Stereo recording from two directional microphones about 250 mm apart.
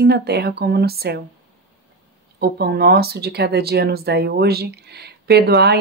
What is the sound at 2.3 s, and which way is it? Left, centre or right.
Speech, right.